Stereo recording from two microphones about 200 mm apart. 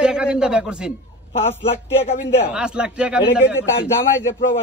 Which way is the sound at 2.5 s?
5° right (ahead or behind).